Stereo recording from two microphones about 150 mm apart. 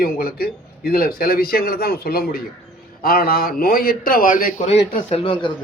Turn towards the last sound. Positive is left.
turn(degrees=35)  # may be behind; listen again after turning